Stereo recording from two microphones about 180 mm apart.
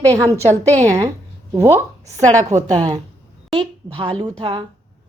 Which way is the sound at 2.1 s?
40° right (ahead or behind).